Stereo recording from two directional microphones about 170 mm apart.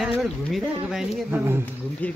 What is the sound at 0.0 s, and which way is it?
Speech, centre (ahead or behind).